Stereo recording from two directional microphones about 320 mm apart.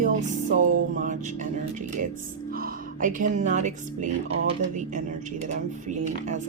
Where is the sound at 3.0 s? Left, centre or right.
Right.